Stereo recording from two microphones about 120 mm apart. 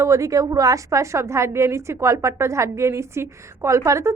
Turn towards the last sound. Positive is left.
turn(degrees=-25)  # may be behind; listen again after turning